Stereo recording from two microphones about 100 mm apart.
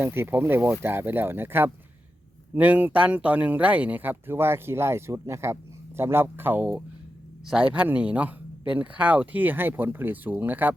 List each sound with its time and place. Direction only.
0.0 s speech: 20° right (ahead or behind)